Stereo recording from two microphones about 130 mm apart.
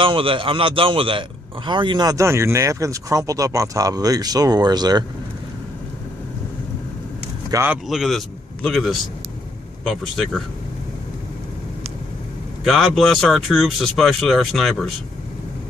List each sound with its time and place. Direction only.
0.0 s a man's voice: 40° right (ahead or behind)
7.5 s speech: 15° right (ahead or behind)
7.9 s speech: centre (ahead or behind)
12.6 s speech: centre (ahead or behind)